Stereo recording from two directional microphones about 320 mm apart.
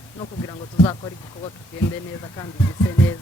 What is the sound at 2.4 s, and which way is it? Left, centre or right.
Speech, centre.